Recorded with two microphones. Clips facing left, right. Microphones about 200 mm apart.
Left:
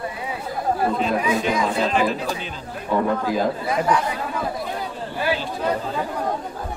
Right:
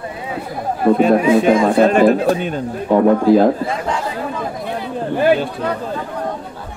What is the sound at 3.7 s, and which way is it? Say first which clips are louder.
Speech: left 1 dB; 25° right (ahead or behind).